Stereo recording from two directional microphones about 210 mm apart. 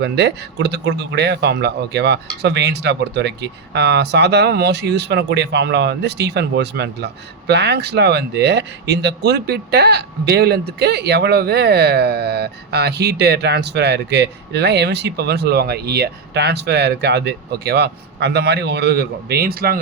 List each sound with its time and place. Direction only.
0.0 s a man's voice: 55° right (ahead or behind)